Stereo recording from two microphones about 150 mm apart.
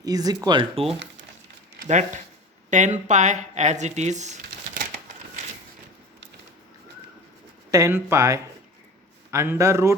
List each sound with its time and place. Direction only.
0.0 s speech: 25° right (ahead or behind)
2.6 s speech: 55° right (ahead or behind)
7.7 s speech: 20° right (ahead or behind)